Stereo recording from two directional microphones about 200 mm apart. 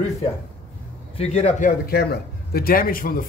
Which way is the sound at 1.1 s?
30° left (ahead or behind).